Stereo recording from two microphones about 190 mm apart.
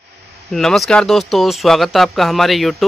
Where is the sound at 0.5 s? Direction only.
Centre (ahead or behind).